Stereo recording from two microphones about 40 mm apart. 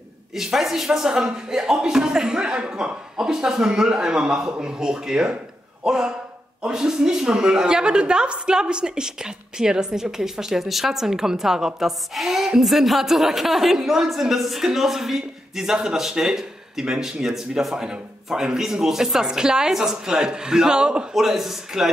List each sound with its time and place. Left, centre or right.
0.3 s a woman's voice: centre; by 21.1 s right
21.1 s a woman's voice: centre